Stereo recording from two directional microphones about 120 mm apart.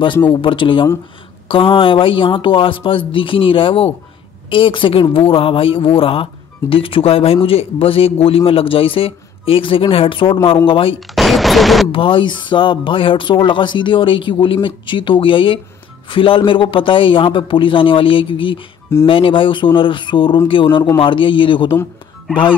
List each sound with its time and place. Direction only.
0.3 s speech: 45° left (ahead or behind)
11.1 s a sound: centre (ahead or behind)
11.9 s speech: 45° left (ahead or behind)